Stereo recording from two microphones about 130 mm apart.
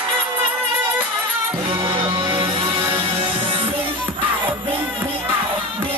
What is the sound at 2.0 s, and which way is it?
Music, 40° right (ahead or behind).